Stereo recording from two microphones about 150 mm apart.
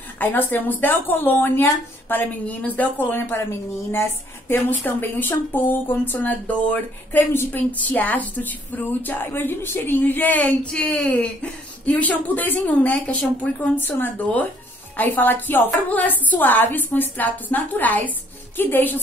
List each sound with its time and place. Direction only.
0.2 s speech: 10° left (ahead or behind)